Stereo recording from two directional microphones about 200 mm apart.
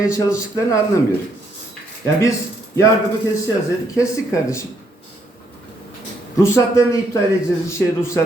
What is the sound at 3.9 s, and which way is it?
Speech, 15° left (ahead or behind).